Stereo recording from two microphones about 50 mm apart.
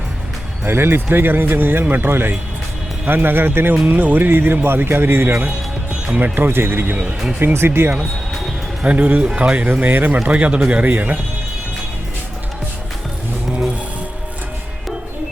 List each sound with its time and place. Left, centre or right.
0.6 s a man's voice: right
6.1 s a man's voice: right
8.8 s speech: right
9.8 s speech: right